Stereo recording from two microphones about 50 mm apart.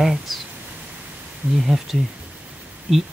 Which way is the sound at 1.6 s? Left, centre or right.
Centre.